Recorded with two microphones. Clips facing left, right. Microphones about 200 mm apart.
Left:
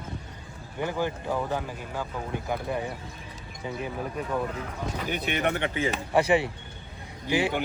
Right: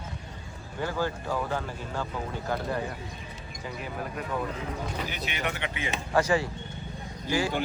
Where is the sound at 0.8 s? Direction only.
15° left (ahead or behind).